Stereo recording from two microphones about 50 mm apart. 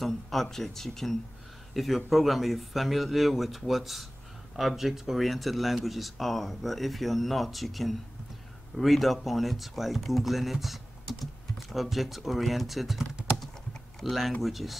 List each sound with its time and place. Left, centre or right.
0.0 s speech: centre
14.0 s speech: centre